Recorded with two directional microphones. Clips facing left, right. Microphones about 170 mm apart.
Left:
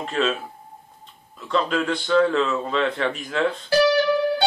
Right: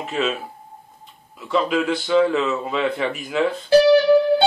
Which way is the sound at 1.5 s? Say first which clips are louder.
Right 2 dB; 5° right (ahead or behind).